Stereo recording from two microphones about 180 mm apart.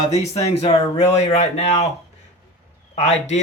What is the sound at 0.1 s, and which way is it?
Speech, 35° left (ahead or behind).